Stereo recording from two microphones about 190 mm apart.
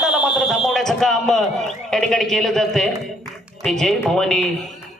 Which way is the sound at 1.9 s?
Centre (ahead or behind).